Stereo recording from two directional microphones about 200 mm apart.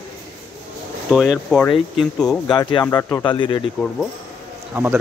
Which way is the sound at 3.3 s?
25° left (ahead or behind).